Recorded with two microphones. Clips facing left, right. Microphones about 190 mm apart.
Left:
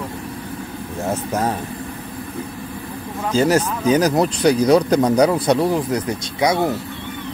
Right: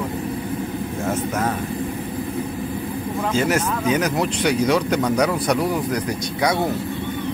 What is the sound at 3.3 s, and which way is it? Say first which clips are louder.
Speech: left 5 dB; 35° left (ahead or behind).